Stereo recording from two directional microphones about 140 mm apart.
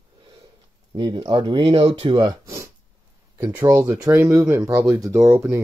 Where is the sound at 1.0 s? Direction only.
35° right (ahead or behind).